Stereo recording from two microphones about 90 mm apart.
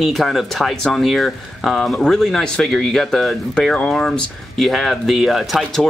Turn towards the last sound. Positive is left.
turn(degrees=0)  # may be behind; listen again after turning